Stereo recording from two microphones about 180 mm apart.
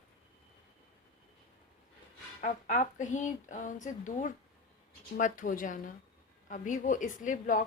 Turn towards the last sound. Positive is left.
turn(degrees=45)  # may be behind; listen again after turning